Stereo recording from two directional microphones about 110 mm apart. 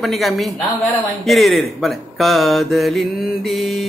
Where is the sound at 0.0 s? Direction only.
Centre (ahead or behind).